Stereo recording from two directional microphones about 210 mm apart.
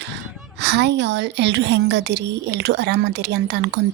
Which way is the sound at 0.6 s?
55° right (ahead or behind).